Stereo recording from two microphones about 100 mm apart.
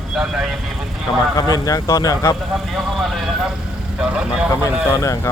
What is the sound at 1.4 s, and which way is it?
Speech, 40° left (ahead or behind).